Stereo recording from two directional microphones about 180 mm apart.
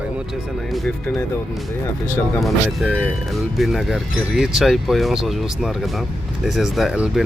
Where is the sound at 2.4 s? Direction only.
Centre (ahead or behind).